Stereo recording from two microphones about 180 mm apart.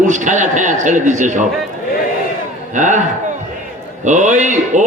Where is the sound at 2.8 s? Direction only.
45° right (ahead or behind).